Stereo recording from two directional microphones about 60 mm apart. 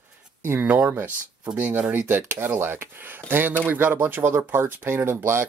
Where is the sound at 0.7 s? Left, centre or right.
Right.